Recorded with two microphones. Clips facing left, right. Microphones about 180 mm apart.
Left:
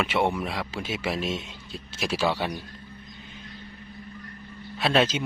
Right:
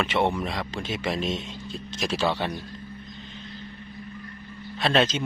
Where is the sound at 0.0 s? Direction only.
10° left (ahead or behind).